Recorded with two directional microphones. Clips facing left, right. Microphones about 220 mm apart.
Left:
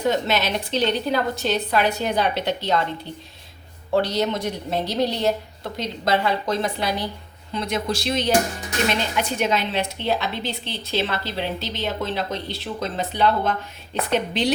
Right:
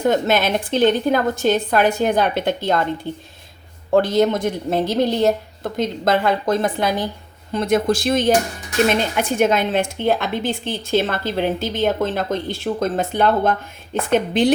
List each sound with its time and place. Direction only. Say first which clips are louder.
0.0 s a woman's voice: right 4 dB; 50° right (ahead or behind)